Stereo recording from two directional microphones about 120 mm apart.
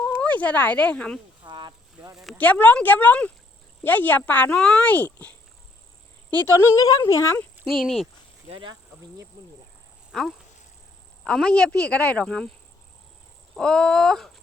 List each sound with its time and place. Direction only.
0.0 s speech: 10° left (ahead or behind)
1.5 s a sound: 35° right (ahead or behind)
2.1 s a sound: 5° right (ahead or behind)
2.4 s speech: 15° left (ahead or behind)
6.3 s speech: 20° left (ahead or behind)
7.3 s speech: 5° left (ahead or behind)
8.4 s speech: 45° right (ahead or behind)
10.1 s speech: 5° right (ahead or behind)
13.6 s a sound: 5° left (ahead or behind)